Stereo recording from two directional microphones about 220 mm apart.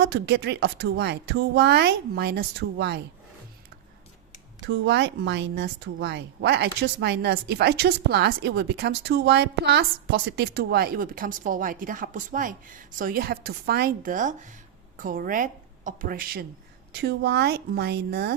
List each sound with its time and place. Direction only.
0.0 s speech: 50° right (ahead or behind)
4.6 s speech: 55° right (ahead or behind)